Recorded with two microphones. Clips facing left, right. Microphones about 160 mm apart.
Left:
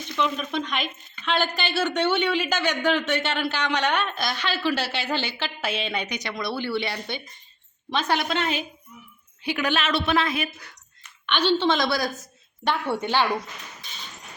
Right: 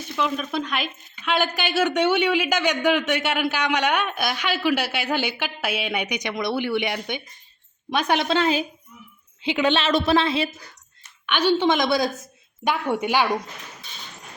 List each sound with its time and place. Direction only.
0.2 s speech: 5° right (ahead or behind)
8.3 s a woman's voice: 35° right (ahead or behind)
11.3 s speech: 10° right (ahead or behind)